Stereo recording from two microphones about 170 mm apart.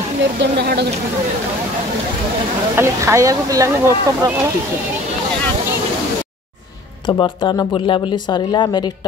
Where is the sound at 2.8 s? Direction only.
15° right (ahead or behind).